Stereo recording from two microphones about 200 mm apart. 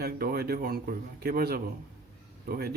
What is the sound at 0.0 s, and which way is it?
A man's voice, 50° right (ahead or behind).